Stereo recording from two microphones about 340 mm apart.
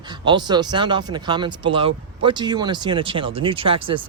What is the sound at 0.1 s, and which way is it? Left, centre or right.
Speech, centre.